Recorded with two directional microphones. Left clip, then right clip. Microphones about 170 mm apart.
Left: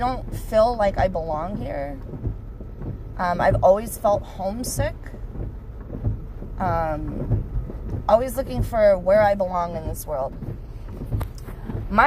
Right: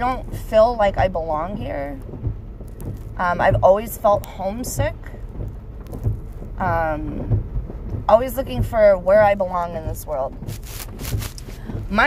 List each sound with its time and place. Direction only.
0.0 s speech: 30° left (ahead or behind)
3.2 s speech: 30° left (ahead or behind)
6.6 s speech: 30° left (ahead or behind)
8.0 s speech: 30° left (ahead or behind)